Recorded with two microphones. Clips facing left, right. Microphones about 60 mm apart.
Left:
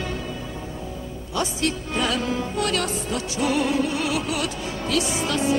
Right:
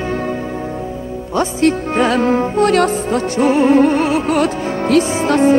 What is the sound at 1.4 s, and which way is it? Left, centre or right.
Music, right.